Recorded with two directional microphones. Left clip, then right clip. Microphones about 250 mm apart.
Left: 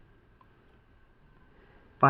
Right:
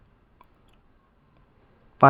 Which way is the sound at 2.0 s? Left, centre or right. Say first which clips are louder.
Right 7 dB; right.